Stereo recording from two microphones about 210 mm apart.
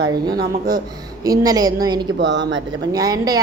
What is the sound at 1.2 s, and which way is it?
Speech, 15° right (ahead or behind).